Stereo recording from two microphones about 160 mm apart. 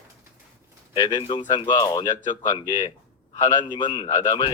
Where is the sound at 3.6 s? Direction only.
30° left (ahead or behind).